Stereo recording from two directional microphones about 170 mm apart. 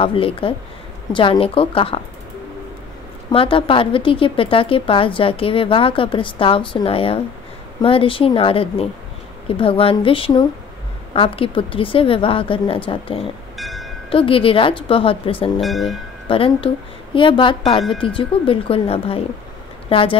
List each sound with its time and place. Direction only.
0.0 s a woman's voice: 30° left (ahead or behind)
3.3 s a woman's voice: 30° left (ahead or behind)
13.6 s wind chime: centre (ahead or behind)
14.1 s a woman's voice: 30° left (ahead or behind)
15.6 s speech: centre (ahead or behind)
16.3 s a woman's voice: 30° left (ahead or behind)